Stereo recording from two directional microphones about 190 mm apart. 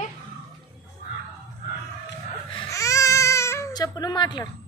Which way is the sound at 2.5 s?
15° left (ahead or behind).